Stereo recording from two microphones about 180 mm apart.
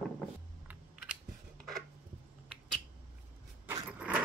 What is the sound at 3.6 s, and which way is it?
Vehicle, 10° right (ahead or behind).